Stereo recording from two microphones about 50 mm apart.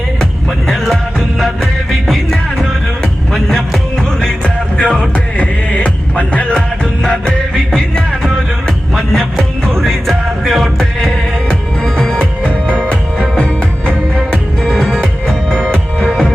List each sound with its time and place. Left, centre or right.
1.4 s music: centre
4.4 s music: centre
7.0 s music: centre